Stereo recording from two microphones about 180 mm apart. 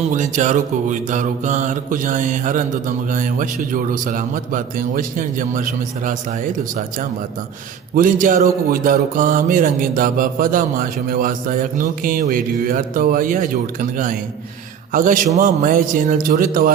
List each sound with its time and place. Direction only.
0.1 s mantra: 45° right (ahead or behind)